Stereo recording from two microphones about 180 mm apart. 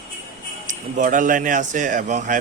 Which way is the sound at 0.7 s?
45° right (ahead or behind).